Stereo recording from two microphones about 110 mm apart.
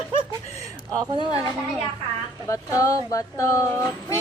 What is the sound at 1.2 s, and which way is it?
A woman's voice, 35° left (ahead or behind).